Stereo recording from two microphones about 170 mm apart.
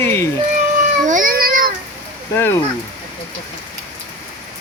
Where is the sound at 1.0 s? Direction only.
50° right (ahead or behind).